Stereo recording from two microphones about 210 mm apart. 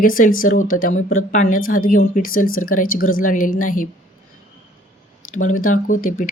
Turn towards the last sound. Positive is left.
turn(degrees=40)  # may be behind; listen again after turning